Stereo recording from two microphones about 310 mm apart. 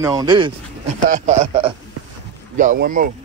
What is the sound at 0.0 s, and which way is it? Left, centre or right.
Speech, centre.